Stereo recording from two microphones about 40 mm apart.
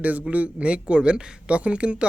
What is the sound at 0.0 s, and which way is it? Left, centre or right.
Speech, right.